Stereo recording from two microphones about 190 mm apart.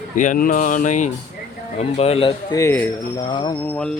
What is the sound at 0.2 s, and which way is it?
Music, 45° left (ahead or behind).